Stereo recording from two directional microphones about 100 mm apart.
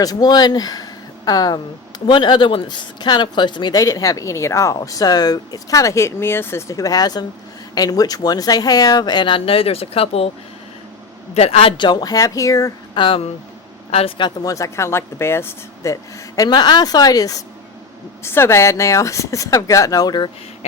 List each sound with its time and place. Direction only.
0.0 s speech: 40° left (ahead or behind); by 10.2 s 75° left (ahead or behind)
11.3 s a man's voice: 85° left
11.8 s speech: 50° left (ahead or behind); by 12.7 s 35° left (ahead or behind)
12.9 s speech: 60° left (ahead or behind)
14.4 s speech: 35° left (ahead or behind)
18.2 s speech: 25° left (ahead or behind); by 20.3 s 45° left (ahead or behind)